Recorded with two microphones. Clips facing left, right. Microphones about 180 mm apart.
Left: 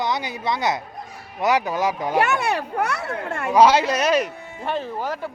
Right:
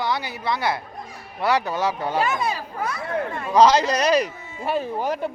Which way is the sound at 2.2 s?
70° left (ahead or behind).